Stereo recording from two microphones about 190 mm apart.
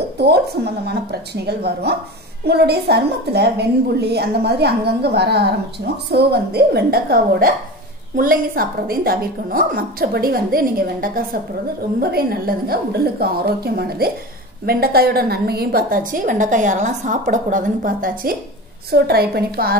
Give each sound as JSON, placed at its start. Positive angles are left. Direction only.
{"t": 0.8, "sound": "a woman's voice", "side_deg": -60}